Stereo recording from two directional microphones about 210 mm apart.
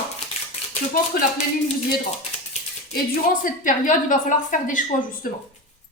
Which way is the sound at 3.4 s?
40° left (ahead or behind).